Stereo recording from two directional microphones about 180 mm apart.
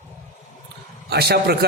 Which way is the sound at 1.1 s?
65° right (ahead or behind).